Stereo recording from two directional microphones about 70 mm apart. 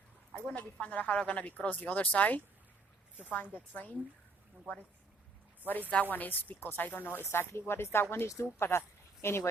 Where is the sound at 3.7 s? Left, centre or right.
Left.